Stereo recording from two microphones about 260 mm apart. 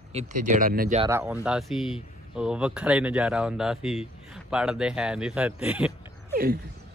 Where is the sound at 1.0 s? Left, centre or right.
Centre.